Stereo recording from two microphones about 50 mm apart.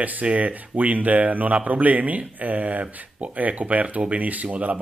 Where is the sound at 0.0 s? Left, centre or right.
Right.